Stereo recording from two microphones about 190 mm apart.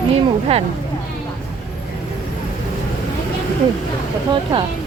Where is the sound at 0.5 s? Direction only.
30° right (ahead or behind).